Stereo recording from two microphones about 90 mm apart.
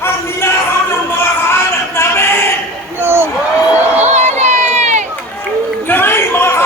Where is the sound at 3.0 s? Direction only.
25° right (ahead or behind).